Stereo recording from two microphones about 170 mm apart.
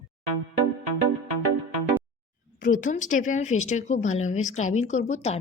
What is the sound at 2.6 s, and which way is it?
Speech, 50° left (ahead or behind).